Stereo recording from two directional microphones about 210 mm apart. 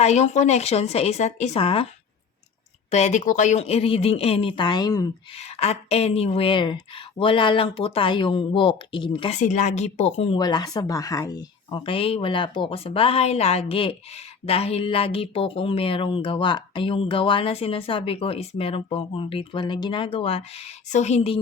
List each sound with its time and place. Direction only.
0.0 s speech: 30° left (ahead or behind)
2.9 s speech: 35° left (ahead or behind); by 5.1 s 20° left (ahead or behind)
5.4 s speech: 30° left (ahead or behind)